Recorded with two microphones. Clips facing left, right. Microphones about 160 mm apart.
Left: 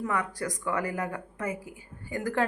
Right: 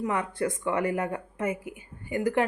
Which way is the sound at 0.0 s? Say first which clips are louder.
Right 3 dB; 25° right (ahead or behind).